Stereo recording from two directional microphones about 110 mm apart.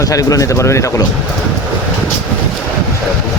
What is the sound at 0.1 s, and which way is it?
Speech, 30° left (ahead or behind).